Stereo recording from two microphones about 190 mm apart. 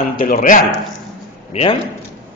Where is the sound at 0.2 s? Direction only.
50° left (ahead or behind).